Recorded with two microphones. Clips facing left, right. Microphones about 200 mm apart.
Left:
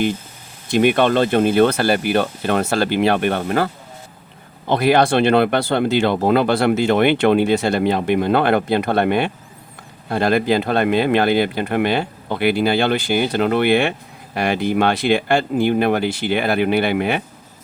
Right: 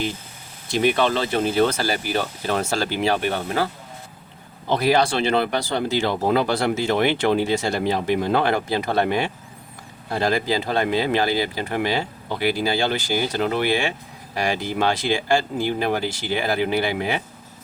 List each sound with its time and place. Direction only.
0.7 s speech: 60° left (ahead or behind)
4.7 s speech: 60° left (ahead or behind)